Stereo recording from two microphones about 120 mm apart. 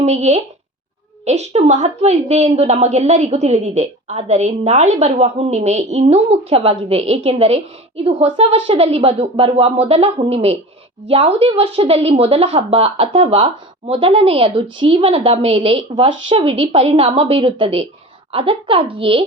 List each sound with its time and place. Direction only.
0.0 s a woman's voice: 70° right (ahead or behind); by 19.2 s 50° right (ahead or behind)